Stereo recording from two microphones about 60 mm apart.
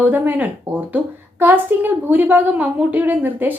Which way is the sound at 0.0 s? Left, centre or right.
Right.